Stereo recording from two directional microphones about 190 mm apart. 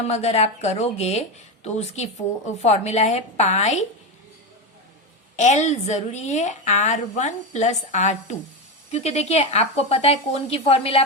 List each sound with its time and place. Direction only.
0.1 s a woman's voice: 35° left (ahead or behind)
5.4 s a woman's voice: 35° left (ahead or behind)